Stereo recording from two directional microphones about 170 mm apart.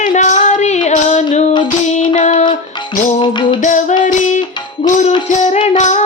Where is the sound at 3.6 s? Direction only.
45° left (ahead or behind).